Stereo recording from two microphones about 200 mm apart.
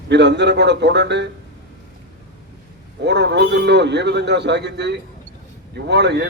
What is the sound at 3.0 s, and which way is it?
A man's voice, 60° right (ahead or behind).